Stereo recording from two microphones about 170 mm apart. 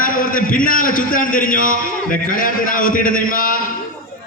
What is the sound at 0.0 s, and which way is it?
A man's voice, 55° left (ahead or behind).